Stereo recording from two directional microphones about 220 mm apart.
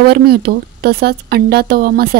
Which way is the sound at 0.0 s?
45° right (ahead or behind).